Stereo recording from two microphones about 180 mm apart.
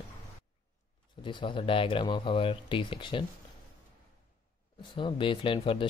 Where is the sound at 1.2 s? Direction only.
25° left (ahead or behind).